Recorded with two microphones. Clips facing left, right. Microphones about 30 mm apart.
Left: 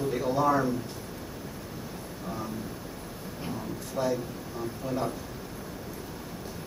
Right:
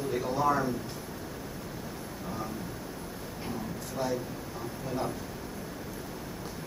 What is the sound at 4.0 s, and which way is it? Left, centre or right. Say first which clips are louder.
Speech: left 3 dB; left.